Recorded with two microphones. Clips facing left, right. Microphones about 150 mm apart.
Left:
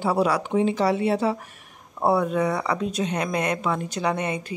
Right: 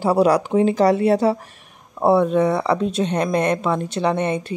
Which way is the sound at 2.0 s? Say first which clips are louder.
Right 5 dB; 25° right (ahead or behind).